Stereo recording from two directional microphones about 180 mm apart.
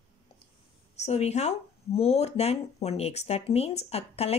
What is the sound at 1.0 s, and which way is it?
Speech, 35° left (ahead or behind).